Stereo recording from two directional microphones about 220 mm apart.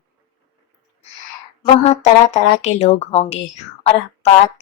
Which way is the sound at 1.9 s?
30° left (ahead or behind).